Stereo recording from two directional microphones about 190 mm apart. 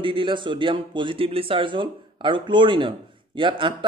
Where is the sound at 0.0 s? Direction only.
25° right (ahead or behind).